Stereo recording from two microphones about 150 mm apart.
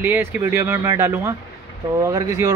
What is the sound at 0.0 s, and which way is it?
Speech, 15° right (ahead or behind).